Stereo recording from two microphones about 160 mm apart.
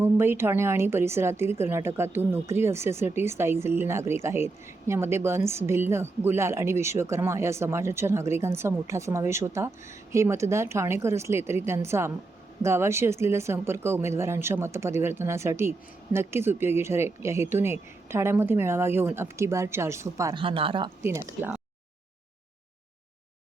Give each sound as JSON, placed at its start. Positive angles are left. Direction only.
{"t": 0.0, "sound": "a woman's voice", "side_deg": -15}
{"t": 20.3, "sound": "speech", "side_deg": -35}
{"t": 21.0, "sound": "a woman's voice", "side_deg": -15}